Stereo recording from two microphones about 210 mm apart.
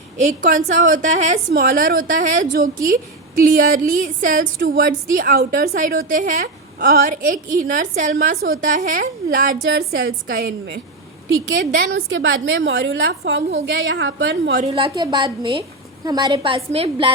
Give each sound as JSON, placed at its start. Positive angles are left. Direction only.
{"t": 0.2, "sound": "a woman's voice", "side_deg": -35}
{"t": 11.9, "sound": "a woman's voice", "side_deg": -65}
{"t": 14.6, "sound": "a woman's voice", "side_deg": -25}